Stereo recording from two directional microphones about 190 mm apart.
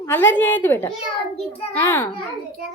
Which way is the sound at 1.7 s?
10° left (ahead or behind).